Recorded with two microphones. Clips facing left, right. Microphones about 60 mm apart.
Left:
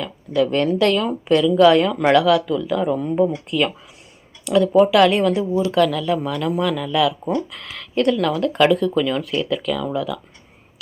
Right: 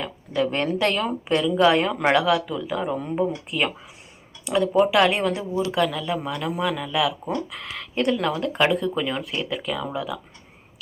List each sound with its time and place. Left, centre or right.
0.0 s speech: right
4.4 s speech: right